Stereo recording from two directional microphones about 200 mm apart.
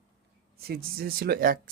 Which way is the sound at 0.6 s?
50° right (ahead or behind).